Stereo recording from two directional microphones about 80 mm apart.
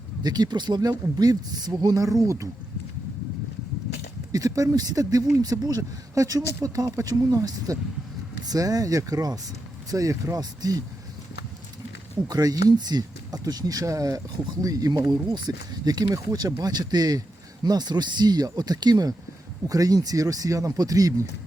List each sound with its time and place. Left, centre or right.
0.2 s speech: right
4.3 s speech: right
12.3 s speech: right